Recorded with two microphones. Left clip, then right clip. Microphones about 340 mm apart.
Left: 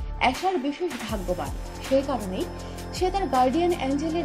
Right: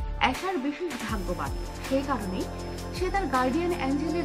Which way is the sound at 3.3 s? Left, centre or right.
Centre.